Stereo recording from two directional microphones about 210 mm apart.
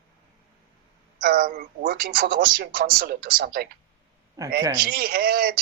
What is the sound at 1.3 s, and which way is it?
Speech, 40° right (ahead or behind).